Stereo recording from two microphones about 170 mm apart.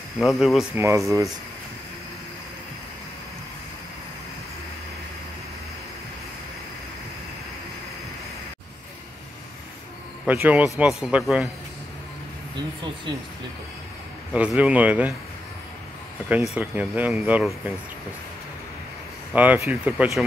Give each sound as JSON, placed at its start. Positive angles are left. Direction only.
{"t": 0.2, "sound": "speech", "side_deg": 0}
{"t": 0.7, "sound": "speech", "side_deg": -15}
{"t": 10.2, "sound": "a man's voice", "side_deg": -10}
{"t": 14.3, "sound": "a man's voice", "side_deg": -5}
{"t": 16.5, "sound": "a man's voice", "side_deg": -10}
{"t": 19.3, "sound": "a man's voice", "side_deg": -10}